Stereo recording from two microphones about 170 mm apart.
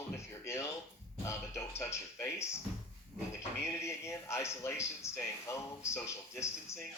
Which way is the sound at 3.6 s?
15° left (ahead or behind).